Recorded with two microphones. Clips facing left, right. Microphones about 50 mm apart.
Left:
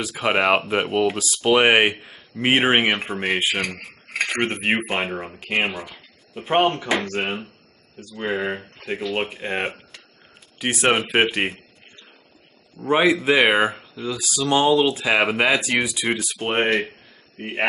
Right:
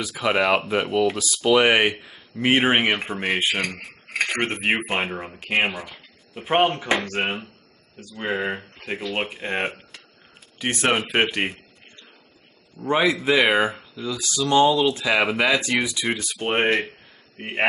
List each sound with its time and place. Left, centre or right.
0.2 s speech: left
12.8 s speech: centre